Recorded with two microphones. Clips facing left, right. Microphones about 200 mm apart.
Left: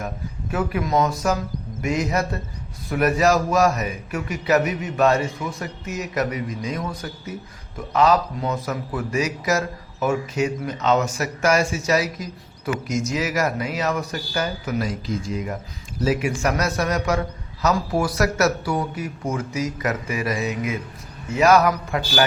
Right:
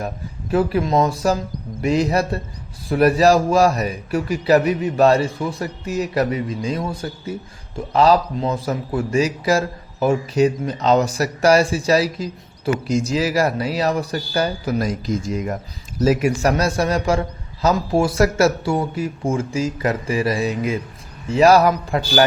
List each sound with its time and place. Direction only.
0.5 s a man's voice: 30° right (ahead or behind)